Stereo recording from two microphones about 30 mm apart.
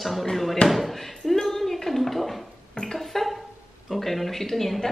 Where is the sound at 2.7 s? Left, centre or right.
Left.